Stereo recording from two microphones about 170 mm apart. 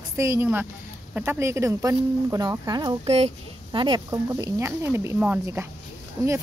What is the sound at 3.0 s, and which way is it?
A woman's voice, 35° right (ahead or behind).